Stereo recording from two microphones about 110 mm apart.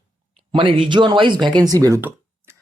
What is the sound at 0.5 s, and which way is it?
Speech, 50° right (ahead or behind).